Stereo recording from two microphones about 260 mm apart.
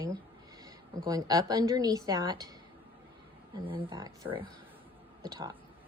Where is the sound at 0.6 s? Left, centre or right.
Centre.